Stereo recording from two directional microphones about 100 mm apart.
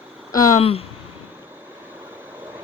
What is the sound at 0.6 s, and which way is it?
Speech, 75° left (ahead or behind).